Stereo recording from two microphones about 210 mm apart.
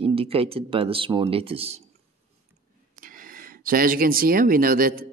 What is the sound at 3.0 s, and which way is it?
Speech, 40° right (ahead or behind).